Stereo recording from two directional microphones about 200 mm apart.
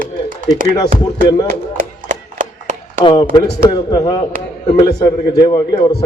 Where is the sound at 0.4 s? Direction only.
20° left (ahead or behind).